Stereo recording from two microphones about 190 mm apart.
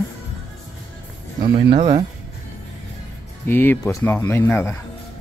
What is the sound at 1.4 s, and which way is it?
Speech, 25° right (ahead or behind).